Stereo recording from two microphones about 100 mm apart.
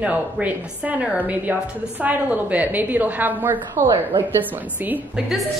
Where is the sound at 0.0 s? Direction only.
15° right (ahead or behind).